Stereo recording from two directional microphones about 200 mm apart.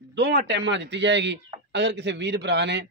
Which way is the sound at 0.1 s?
60° right (ahead or behind).